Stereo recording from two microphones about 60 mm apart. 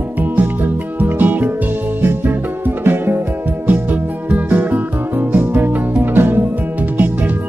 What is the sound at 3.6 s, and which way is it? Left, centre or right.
Music, right.